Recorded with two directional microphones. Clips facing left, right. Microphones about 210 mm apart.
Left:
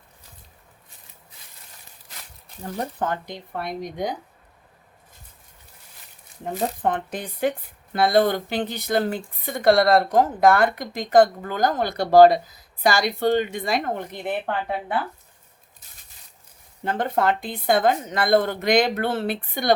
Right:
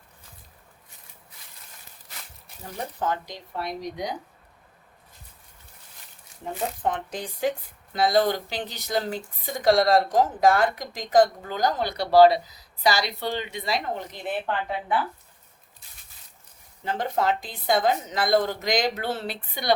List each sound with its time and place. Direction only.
3.0 s speech: 55° left (ahead or behind)
6.8 s speech: 60° left (ahead or behind)
16.8 s speech: 55° left (ahead or behind)